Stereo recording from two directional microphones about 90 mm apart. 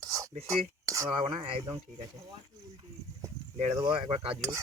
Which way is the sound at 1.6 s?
45° right (ahead or behind).